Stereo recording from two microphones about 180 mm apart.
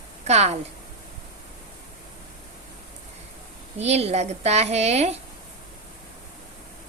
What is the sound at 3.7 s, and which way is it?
A woman's voice, 35° right (ahead or behind).